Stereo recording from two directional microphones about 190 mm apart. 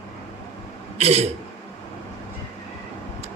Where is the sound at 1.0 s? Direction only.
35° right (ahead or behind).